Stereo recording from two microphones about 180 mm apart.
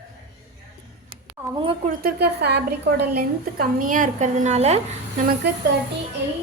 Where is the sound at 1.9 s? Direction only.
60° right (ahead or behind).